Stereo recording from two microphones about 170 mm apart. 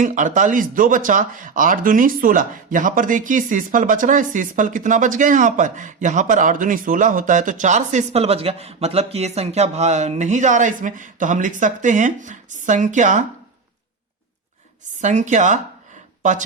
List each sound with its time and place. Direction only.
0.0 s speech: 50° right (ahead or behind)
15.0 s speech: 45° right (ahead or behind)